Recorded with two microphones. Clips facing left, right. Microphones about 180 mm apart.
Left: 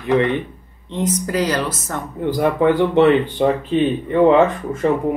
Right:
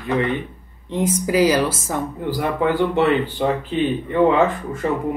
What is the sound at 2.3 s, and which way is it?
Speech, 20° left (ahead or behind).